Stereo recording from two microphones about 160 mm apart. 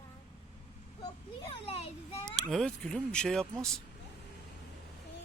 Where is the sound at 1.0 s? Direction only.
30° left (ahead or behind).